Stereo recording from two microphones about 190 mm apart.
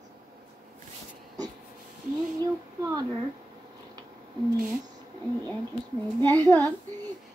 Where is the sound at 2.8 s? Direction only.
20° right (ahead or behind).